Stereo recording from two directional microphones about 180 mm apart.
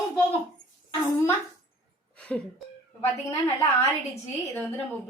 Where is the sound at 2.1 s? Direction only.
10° left (ahead or behind).